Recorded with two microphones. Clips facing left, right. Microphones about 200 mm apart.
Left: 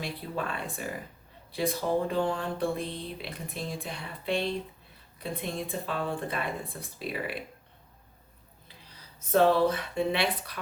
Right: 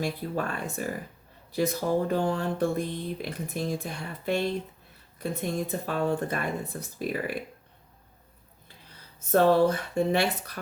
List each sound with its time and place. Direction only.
0.0 s speech: 45° right (ahead or behind)
9.3 s speech: 50° right (ahead or behind)